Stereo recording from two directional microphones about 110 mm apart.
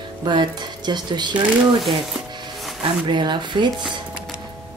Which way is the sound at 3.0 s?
45° right (ahead or behind).